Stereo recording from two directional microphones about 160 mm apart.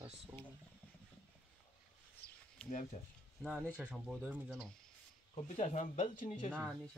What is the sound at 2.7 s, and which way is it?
Speech, 50° left (ahead or behind).